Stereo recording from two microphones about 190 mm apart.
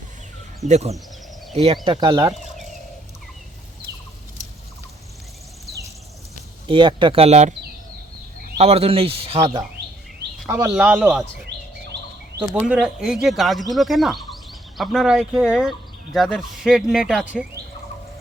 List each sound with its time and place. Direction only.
0.6 s speech: 35° right (ahead or behind)
6.7 s speech: 25° right (ahead or behind)
8.5 s speech: 35° right (ahead or behind)
9.4 s a man's voice: 20° right (ahead or behind)
12.5 s speech: centre (ahead or behind)